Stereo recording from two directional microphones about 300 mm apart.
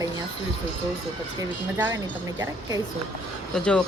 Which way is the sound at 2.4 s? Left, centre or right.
Centre.